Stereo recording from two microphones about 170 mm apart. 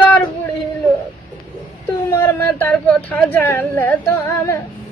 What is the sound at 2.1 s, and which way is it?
Speech, 15° left (ahead or behind).